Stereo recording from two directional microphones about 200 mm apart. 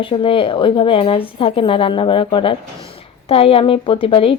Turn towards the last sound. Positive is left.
turn(degrees=25)  # may be behind; listen again after turning